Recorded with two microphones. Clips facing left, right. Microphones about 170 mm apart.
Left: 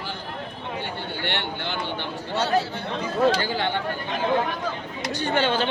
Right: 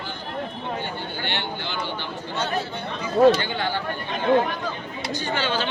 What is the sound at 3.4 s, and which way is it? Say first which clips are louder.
Speech: left 1 dB; 30° left (ahead or behind).